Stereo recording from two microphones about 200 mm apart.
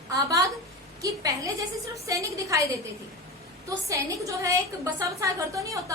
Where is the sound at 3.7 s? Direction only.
15° right (ahead or behind).